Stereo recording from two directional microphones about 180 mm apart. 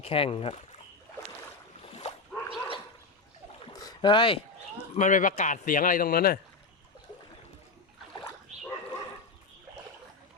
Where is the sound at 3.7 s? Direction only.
20° left (ahead or behind).